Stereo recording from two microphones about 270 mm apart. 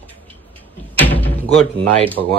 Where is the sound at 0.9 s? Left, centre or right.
Centre.